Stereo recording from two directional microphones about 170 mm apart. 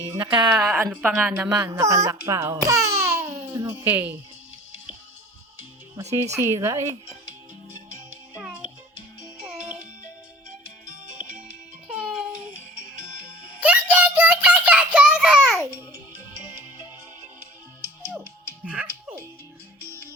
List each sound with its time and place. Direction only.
0.1 s speech: 25° right (ahead or behind)
0.5 s a woman's voice: 15° right (ahead or behind)
6.0 s a woman's voice: 20° right (ahead or behind)
11.9 s music: 5° right (ahead or behind)
13.6 s child singing: 10° right (ahead or behind)
18.0 s music: 10° right (ahead or behind)